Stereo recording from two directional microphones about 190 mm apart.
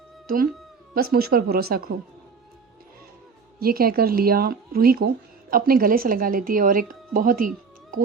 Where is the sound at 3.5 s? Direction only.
50° right (ahead or behind).